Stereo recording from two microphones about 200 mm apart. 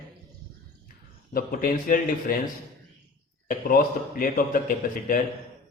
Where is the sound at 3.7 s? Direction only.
45° left (ahead or behind).